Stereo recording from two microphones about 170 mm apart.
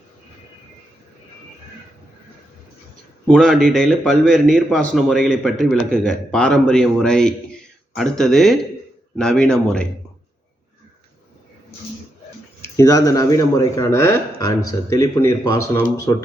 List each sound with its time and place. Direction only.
3.2 s a man's voice: 5° left (ahead or behind)
12.7 s speech: 20° left (ahead or behind)